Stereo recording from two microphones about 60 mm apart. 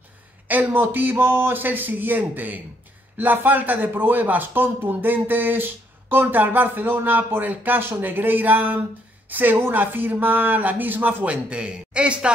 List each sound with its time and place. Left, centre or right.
0.5 s speech: right
11.2 s a man's voice: centre